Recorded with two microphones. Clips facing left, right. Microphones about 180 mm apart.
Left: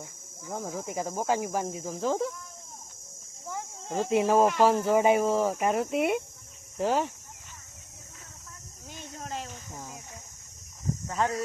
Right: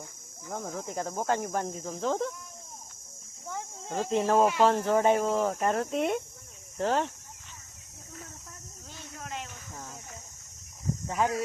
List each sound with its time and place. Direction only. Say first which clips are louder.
0.5 s speech: left 1 dB; 5° left (ahead or behind)
3.4 s speech: left 1 dB; centre (ahead or behind)
9.1 s a sound: left 2 dB; 35° left (ahead or behind)
11.2 s speech: even; 10° right (ahead or behind)